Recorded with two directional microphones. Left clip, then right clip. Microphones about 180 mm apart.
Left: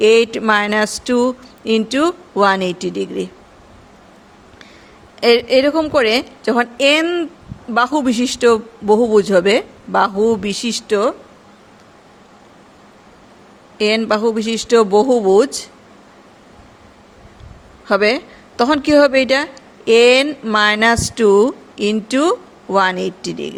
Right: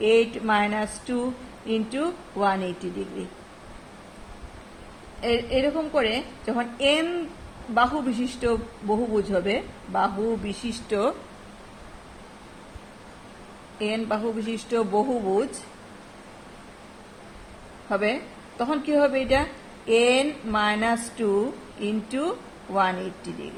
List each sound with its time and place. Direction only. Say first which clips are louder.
0.0 s a woman's voice: left 9 dB; 60° left (ahead or behind)
5.2 s a woman's voice: left 12 dB; 60° left (ahead or behind)
13.7 s a woman's voice: left 12 dB; 60° left (ahead or behind)
17.8 s a woman's voice: left 11 dB; 60° left (ahead or behind)